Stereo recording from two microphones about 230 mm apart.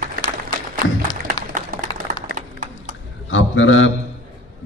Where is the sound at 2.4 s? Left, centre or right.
Right.